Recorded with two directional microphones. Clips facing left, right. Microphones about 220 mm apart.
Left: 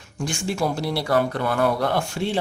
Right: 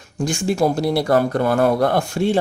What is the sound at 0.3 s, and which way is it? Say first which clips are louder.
Speech: right 6 dB; 45° right (ahead or behind).